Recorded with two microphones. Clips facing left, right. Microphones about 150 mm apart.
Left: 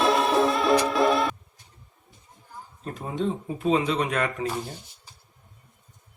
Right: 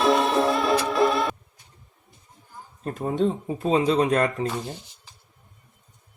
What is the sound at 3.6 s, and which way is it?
Speech, 35° right (ahead or behind).